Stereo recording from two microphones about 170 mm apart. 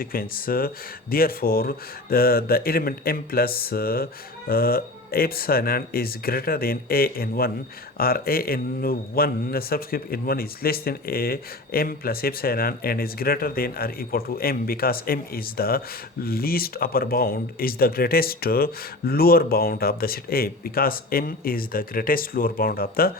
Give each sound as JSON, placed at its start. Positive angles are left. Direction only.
{"t": 0.0, "sound": "a man's voice", "side_deg": 60}